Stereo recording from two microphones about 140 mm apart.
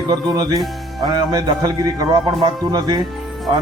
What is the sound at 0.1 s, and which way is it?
A man's voice, 30° right (ahead or behind).